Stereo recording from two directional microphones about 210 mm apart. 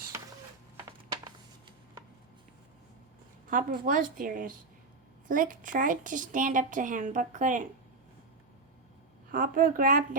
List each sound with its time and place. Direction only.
0.1 s a sound: 15° right (ahead or behind)
3.5 s a woman's voice: 40° right (ahead or behind)
9.3 s a woman's voice: 40° right (ahead or behind)